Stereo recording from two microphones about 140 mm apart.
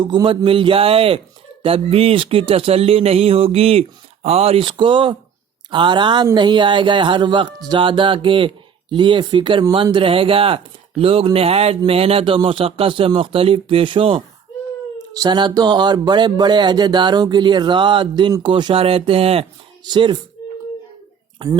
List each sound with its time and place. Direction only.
0.0 s speech: 35° right (ahead or behind)
19.8 s speech: 30° right (ahead or behind)
20.4 s a sound: 25° left (ahead or behind)
21.3 s speech: 35° right (ahead or behind)